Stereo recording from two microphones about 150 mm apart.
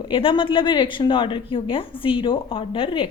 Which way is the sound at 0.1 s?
35° left (ahead or behind).